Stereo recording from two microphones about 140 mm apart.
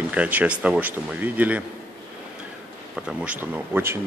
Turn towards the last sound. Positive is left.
turn(degrees=-15)  # may be behind; listen again after turning